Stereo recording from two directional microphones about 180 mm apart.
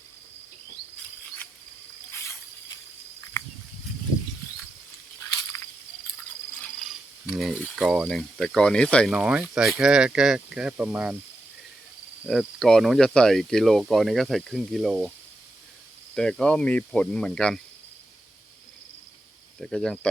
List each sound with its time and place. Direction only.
2.1 s a sound: 15° left (ahead or behind)
6.6 s cricket: centre (ahead or behind)
8.0 s speech: 5° left (ahead or behind)
12.2 s speech: centre (ahead or behind)
16.1 s speech: 5° left (ahead or behind)
19.5 s speech: centre (ahead or behind)